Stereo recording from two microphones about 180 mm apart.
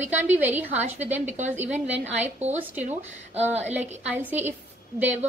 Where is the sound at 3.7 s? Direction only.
10° right (ahead or behind).